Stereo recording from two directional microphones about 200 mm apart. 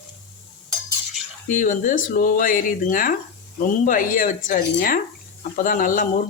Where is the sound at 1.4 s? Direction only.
40° left (ahead or behind).